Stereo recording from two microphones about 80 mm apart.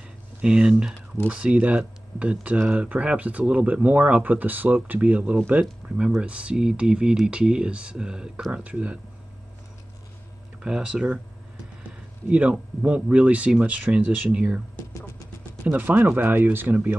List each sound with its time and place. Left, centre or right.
0.4 s speech: centre
10.6 s speech: centre
12.3 s speech: centre
15.6 s speech: right